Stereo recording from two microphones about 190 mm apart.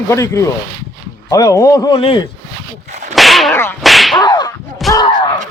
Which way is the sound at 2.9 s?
40° right (ahead or behind).